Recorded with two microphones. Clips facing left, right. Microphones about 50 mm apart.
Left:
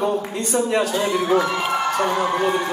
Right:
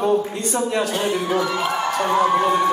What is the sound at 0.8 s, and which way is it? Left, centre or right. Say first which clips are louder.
Speech: left 1 dB; right.